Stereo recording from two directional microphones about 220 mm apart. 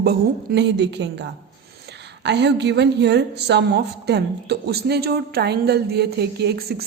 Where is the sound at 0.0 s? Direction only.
50° right (ahead or behind).